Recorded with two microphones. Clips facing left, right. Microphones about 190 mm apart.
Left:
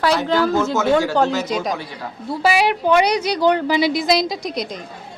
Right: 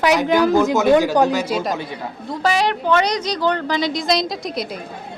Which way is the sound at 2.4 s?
10° left (ahead or behind).